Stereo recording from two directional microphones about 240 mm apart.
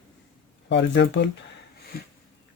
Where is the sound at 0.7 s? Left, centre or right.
Left.